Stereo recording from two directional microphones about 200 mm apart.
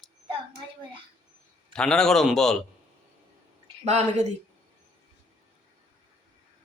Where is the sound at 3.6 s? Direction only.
30° right (ahead or behind).